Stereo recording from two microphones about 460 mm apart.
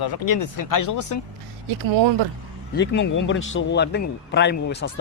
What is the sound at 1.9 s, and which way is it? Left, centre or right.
Speech, right.